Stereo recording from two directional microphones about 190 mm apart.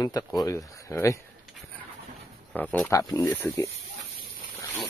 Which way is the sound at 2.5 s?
5° left (ahead or behind).